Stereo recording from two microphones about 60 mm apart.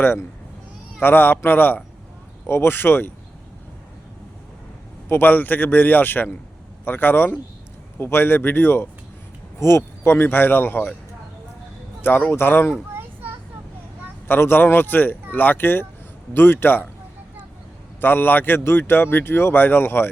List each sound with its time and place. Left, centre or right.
0.0 s speech: left
5.0 s speech: left
9.6 s speech: left
12.3 s speech: left
14.3 s speech: left
18.0 s speech: left